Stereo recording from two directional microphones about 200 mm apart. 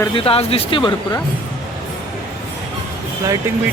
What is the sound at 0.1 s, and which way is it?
Speech, 25° left (ahead or behind).